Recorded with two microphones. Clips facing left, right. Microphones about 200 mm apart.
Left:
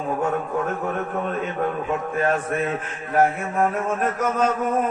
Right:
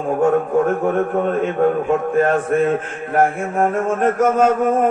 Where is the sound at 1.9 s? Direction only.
50° right (ahead or behind).